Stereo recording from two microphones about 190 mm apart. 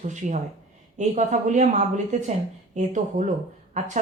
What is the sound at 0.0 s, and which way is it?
Speech, 40° right (ahead or behind).